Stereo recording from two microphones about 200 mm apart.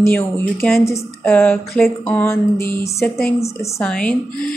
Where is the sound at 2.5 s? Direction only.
45° left (ahead or behind).